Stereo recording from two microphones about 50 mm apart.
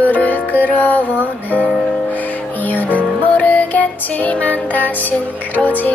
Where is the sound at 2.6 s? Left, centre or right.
Left.